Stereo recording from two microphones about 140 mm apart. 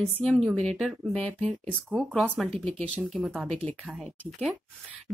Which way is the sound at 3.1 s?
10° right (ahead or behind).